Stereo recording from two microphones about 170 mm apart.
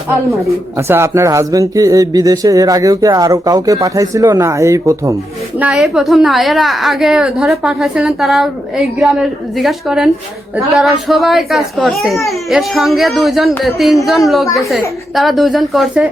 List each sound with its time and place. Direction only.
0.4 s speech: 15° right (ahead or behind)
5.5 s a woman's voice: 5° right (ahead or behind)